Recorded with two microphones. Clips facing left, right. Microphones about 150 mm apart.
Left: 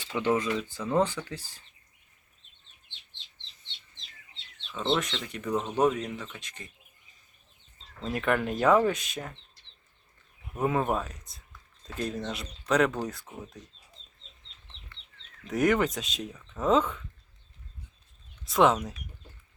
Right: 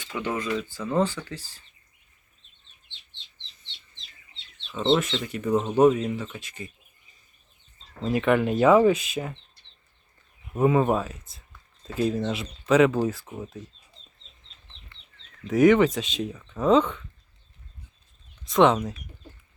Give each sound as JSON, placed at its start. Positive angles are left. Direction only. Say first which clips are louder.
{"t": 0.0, "sound": "speech", "louder": "left 3 dB", "side_deg": 25}
{"t": 5.1, "sound": "speech", "louder": "right 6 dB", "side_deg": -5}
{"t": 8.0, "sound": "speech", "louder": "right 6 dB", "side_deg": 0}
{"t": 10.6, "sound": "speech", "louder": "right 6 dB", "side_deg": 0}
{"t": 15.4, "sound": "speech", "louder": "right 7 dB", "side_deg": 0}
{"t": 18.4, "sound": "speech", "louder": "right 4 dB", "side_deg": 0}